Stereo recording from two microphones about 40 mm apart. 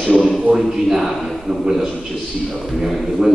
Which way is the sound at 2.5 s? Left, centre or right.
Centre.